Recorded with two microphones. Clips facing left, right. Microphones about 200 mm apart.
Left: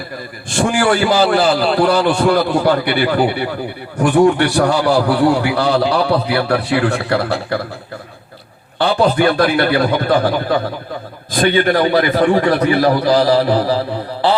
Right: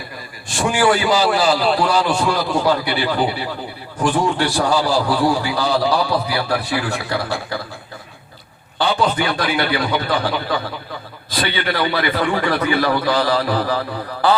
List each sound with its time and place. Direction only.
0.6 s a man's voice: 55° left (ahead or behind)
9.1 s a man's voice: 55° left (ahead or behind); by 13.0 s 40° left (ahead or behind)
13.1 s mantra: 35° left (ahead or behind)